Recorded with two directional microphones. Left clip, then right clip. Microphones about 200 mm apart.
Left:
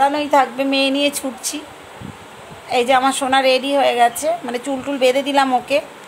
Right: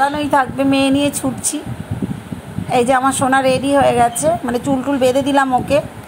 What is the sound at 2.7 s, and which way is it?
A woman's voice, 5° right (ahead or behind).